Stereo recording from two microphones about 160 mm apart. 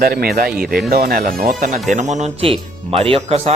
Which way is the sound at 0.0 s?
70° right (ahead or behind).